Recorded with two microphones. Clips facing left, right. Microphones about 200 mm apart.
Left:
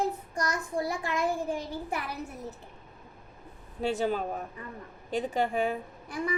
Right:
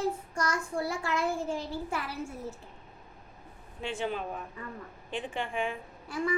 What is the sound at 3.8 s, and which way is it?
A woman's voice, 40° left (ahead or behind).